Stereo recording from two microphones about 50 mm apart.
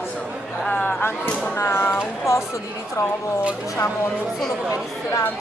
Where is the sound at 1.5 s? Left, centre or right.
Left.